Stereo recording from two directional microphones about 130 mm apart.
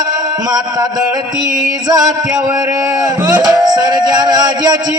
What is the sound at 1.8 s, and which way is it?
Music, 30° right (ahead or behind).